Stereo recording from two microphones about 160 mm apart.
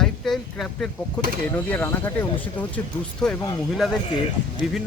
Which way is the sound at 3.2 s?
5° left (ahead or behind).